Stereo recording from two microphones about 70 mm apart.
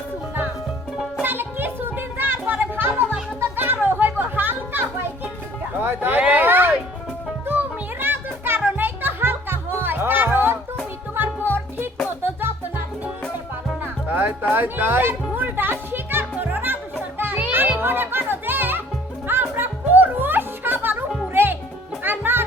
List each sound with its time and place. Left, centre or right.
1.2 s music: right
5.7 s a sound: right
7.4 s music: right
13.8 s music: right
14.5 s speech: right
15.4 s music: right